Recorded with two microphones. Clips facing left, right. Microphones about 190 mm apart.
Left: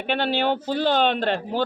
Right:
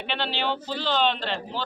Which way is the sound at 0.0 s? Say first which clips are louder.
Left 6 dB; 50° left (ahead or behind).